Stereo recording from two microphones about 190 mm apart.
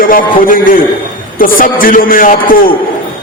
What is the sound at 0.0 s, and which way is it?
Speech, 50° left (ahead or behind).